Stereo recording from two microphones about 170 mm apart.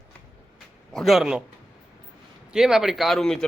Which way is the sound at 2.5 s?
5° right (ahead or behind).